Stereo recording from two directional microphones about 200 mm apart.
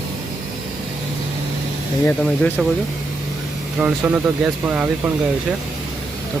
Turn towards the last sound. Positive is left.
turn(degrees=-5)  # may be behind; listen again after turning